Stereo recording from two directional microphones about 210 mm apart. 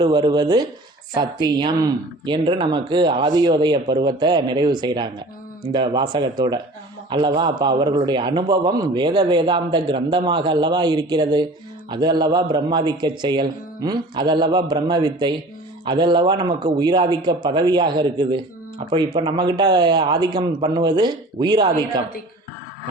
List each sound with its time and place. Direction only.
0.0 s a man's voice: 20° right (ahead or behind)